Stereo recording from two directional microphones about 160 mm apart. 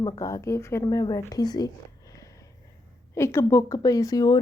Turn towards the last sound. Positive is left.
turn(degrees=25)  # may be behind; listen again after turning